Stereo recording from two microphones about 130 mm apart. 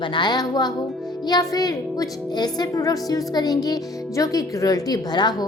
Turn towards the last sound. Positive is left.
turn(degrees=30)  # may be behind; listen again after turning